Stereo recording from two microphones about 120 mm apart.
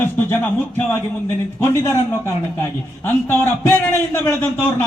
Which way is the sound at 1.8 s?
25° left (ahead or behind).